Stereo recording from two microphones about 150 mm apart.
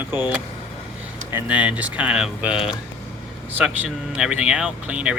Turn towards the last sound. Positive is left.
turn(degrees=-5)  # may be behind; listen again after turning